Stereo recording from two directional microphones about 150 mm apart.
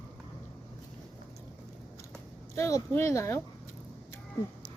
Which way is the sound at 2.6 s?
20° left (ahead or behind).